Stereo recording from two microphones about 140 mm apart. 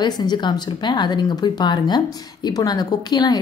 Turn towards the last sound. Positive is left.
turn(degrees=30)  # may be behind; listen again after turning